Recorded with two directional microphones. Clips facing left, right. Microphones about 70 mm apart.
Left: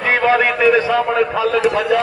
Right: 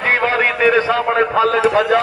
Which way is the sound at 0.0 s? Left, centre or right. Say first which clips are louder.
Left 2 dB; right.